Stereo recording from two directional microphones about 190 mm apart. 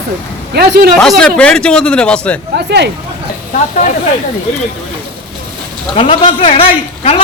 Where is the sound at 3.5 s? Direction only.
40° left (ahead or behind).